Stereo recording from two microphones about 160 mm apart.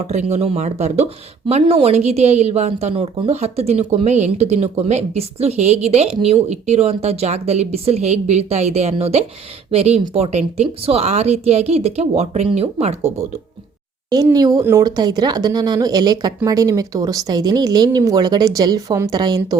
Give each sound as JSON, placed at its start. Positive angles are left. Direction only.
{"t": 0.0, "sound": "a woman's voice", "side_deg": -45}
{"t": 14.3, "sound": "speech", "side_deg": -25}